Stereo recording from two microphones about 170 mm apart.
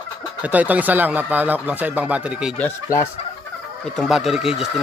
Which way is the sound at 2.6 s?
15° left (ahead or behind).